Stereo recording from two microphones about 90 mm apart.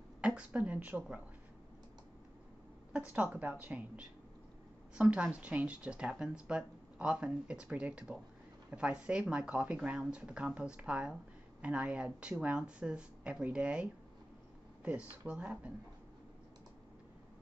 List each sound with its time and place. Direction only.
0.2 s speech: 15° right (ahead or behind)
3.1 s speech: 20° right (ahead or behind)